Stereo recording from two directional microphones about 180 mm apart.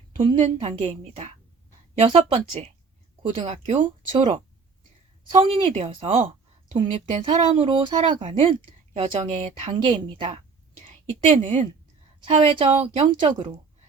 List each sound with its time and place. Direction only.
0.3 s speech: 35° right (ahead or behind)
11.3 s speech: 40° right (ahead or behind)